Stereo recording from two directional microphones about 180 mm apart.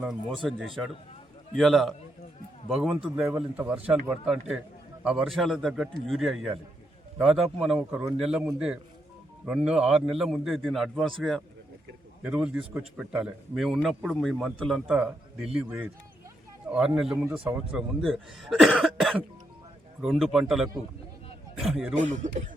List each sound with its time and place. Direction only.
0.1 s a man's voice: centre (ahead or behind)
1.5 s a man's voice: centre (ahead or behind)
16.6 s a man's voice: 5° right (ahead or behind)
21.9 s speech: 40° right (ahead or behind)